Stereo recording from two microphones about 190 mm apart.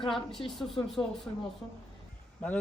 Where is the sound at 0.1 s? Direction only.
Centre (ahead or behind).